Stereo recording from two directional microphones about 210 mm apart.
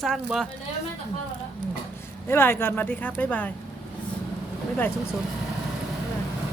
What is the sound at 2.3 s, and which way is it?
Speech, 10° left (ahead or behind).